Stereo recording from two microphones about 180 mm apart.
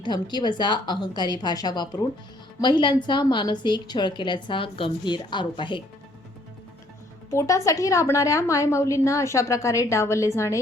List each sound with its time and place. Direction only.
0.0 s a woman's voice: 25° left (ahead or behind)
7.3 s a woman's voice: 15° left (ahead or behind)